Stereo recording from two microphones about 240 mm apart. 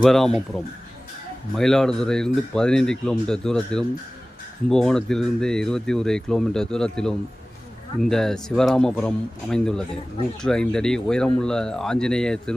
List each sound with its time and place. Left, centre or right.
0.0 s speech: centre